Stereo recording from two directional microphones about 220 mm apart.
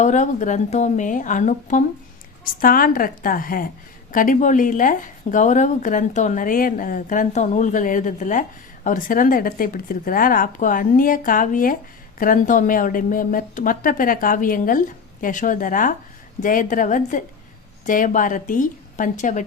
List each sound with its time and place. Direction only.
0.0 s speech: 35° left (ahead or behind)